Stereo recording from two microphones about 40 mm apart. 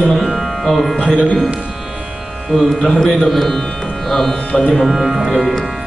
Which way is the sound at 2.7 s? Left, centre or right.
Centre.